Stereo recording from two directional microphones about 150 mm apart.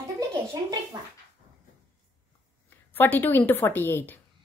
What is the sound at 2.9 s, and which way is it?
A woman's voice, 15° left (ahead or behind).